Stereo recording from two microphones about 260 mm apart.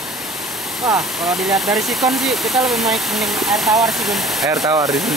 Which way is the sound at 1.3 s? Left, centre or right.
Centre.